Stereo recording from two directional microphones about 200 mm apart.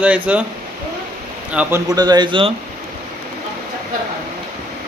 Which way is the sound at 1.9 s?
20° right (ahead or behind).